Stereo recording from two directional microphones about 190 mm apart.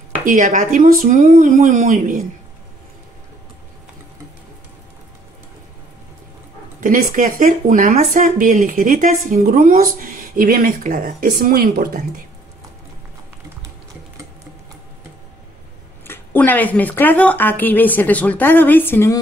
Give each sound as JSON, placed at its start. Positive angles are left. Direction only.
{"t": 0.2, "sound": "speech", "side_deg": -45}
{"t": 6.8, "sound": "speech", "side_deg": -45}
{"t": 16.1, "sound": "speech", "side_deg": 10}